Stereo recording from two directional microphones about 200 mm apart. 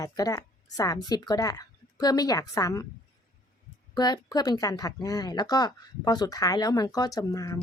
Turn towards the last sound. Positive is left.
turn(degrees=15)  # may be behind; listen again after turning